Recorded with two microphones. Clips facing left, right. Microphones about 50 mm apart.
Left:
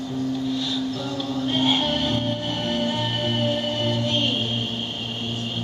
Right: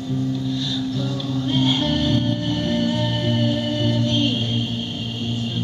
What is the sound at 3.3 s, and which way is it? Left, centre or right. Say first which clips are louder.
Music: right 2 dB; left.